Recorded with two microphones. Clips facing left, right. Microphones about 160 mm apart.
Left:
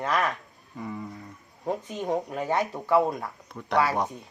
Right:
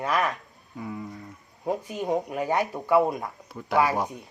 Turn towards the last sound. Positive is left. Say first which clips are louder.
# right 1 dB
turn(degrees=-5)  # may be behind; listen again after turning